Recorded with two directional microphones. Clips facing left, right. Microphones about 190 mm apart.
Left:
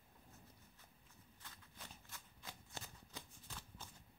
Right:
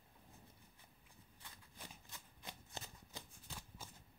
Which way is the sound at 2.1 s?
20° right (ahead or behind).